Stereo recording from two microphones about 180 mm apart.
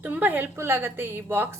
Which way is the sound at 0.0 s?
10° right (ahead or behind).